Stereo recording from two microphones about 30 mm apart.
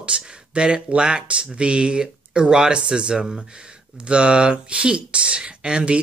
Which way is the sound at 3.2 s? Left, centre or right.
Centre.